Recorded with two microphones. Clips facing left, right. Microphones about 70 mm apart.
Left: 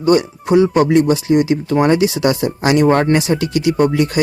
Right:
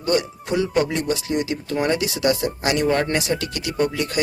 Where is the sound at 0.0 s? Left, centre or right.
Centre.